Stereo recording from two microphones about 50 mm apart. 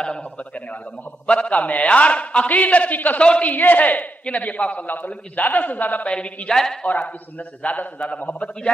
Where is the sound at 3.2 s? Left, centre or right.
Left.